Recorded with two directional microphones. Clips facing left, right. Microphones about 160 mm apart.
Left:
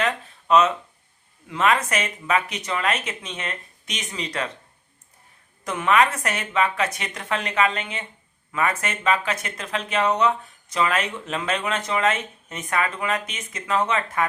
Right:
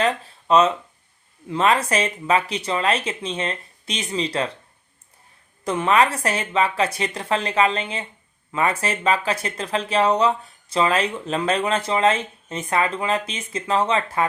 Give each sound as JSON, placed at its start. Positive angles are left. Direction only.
{"t": 0.0, "sound": "a sound", "side_deg": -30}
{"t": 1.5, "sound": "speech", "side_deg": -30}
{"t": 5.6, "sound": "speech", "side_deg": -30}